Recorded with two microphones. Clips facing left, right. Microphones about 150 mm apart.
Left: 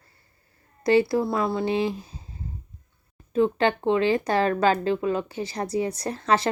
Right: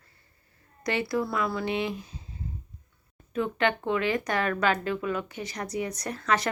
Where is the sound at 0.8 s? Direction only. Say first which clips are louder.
Left 8 dB; 30° left (ahead or behind).